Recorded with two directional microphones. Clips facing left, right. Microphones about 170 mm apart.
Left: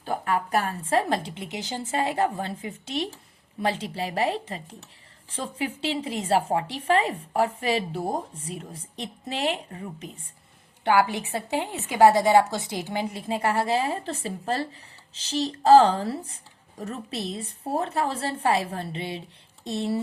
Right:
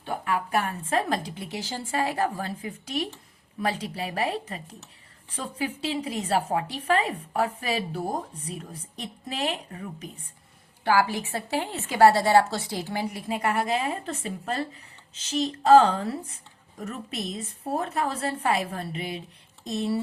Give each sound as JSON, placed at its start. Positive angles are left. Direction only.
{"t": 0.0, "sound": "a woman's voice", "side_deg": 35}